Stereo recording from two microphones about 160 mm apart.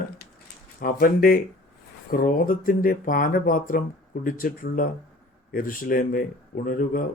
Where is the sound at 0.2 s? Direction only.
80° left.